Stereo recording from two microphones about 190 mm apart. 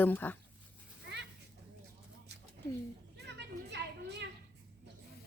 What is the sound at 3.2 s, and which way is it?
Children playing, 65° right (ahead or behind).